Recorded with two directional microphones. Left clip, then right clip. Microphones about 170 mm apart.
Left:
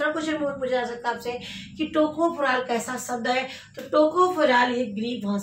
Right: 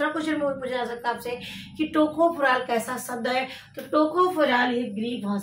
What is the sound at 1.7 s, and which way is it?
A woman's voice, 20° right (ahead or behind).